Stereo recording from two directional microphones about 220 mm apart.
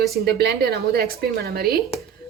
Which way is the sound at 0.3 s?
45° right (ahead or behind).